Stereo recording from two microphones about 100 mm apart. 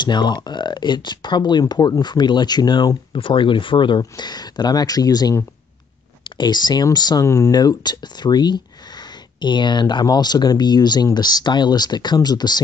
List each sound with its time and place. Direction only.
0.0 s speech: 50° left (ahead or behind)
3.1 s speech: 60° left (ahead or behind)
4.0 s speech: 45° left (ahead or behind)
6.3 s speech: 45° left (ahead or behind)
7.2 s speech: 30° left (ahead or behind)
7.5 s speech: 45° left (ahead or behind)